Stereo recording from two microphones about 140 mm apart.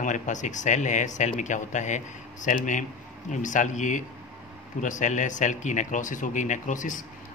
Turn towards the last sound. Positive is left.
turn(degrees=60)  # may be behind; listen again after turning